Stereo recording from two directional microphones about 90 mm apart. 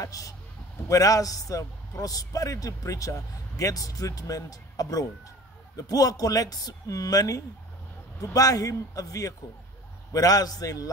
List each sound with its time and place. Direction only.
0.0 s a man's voice: 40° left (ahead or behind)